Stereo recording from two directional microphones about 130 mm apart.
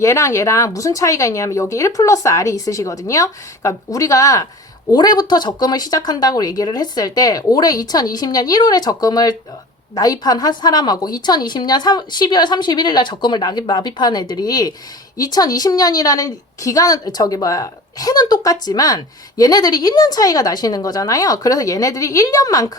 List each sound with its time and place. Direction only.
0.0 s a woman's voice: 20° left (ahead or behind)